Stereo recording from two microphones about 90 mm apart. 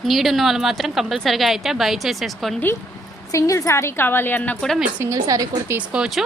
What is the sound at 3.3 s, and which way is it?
A woman's voice, 35° left (ahead or behind).